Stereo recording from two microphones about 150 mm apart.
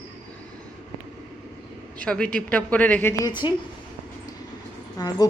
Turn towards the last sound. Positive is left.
turn(degrees=25)  # may be behind; listen again after turning